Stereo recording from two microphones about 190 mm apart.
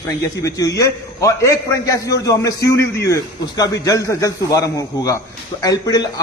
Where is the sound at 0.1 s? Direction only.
15° left (ahead or behind).